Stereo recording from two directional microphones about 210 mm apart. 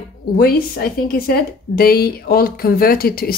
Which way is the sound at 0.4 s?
45° left (ahead or behind).